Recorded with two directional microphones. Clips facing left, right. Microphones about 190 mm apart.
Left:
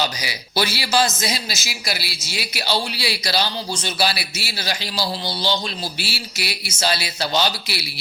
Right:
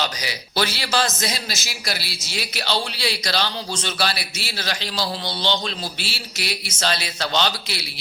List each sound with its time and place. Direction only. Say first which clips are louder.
0.2 s speech: left 1 dB; 10° left (ahead or behind)